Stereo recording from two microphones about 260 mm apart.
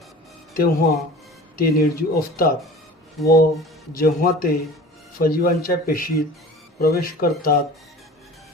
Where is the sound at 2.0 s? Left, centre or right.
Left.